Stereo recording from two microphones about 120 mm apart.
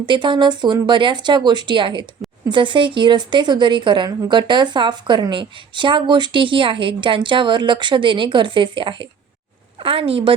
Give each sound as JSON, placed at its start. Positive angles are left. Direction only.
{"t": 0.0, "sound": "a woman's voice", "side_deg": -40}